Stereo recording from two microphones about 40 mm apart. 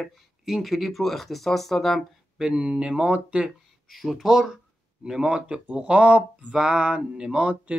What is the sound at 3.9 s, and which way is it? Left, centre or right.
Speech, centre.